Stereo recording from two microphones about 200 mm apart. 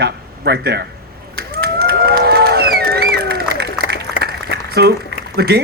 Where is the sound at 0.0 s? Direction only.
55° right (ahead or behind).